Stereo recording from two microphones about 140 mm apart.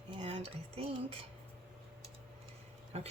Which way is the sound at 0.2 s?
45° right (ahead or behind).